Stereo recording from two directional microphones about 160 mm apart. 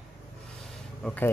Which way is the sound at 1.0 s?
10° left (ahead or behind).